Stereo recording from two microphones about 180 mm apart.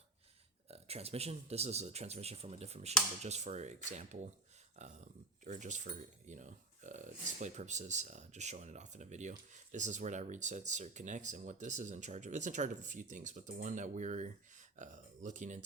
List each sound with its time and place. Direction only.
0.7 s speech: 35° right (ahead or behind)